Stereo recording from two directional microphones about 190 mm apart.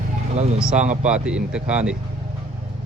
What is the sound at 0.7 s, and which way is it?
Speech, 40° right (ahead or behind).